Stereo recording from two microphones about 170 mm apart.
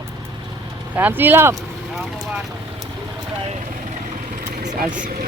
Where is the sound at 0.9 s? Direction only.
10° right (ahead or behind).